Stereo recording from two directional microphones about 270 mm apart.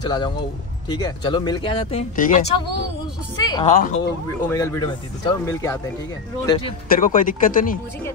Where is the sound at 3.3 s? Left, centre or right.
Centre.